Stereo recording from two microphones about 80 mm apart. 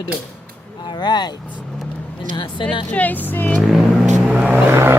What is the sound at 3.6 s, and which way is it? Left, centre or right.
Vehicle, centre.